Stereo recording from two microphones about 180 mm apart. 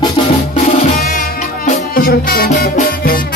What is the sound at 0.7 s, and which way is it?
Music, 45° left (ahead or behind).